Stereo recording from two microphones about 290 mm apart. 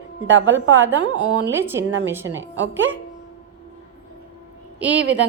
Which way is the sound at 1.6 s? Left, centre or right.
Centre.